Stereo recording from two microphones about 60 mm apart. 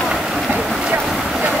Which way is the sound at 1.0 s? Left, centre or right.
Centre.